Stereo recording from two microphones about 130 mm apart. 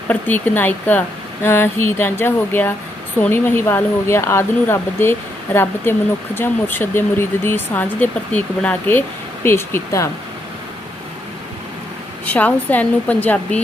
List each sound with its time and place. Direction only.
0.1 s speech: 15° left (ahead or behind)
12.2 s speech: 10° left (ahead or behind)